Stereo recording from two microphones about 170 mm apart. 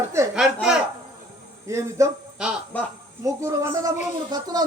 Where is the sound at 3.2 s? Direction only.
20° right (ahead or behind).